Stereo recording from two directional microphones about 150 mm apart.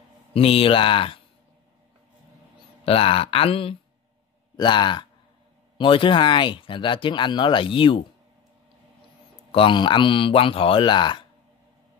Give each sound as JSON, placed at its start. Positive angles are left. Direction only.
{"t": 0.3, "sound": "speech", "side_deg": 40}
{"t": 2.8, "sound": "speech", "side_deg": 40}
{"t": 9.5, "sound": "speech", "side_deg": 35}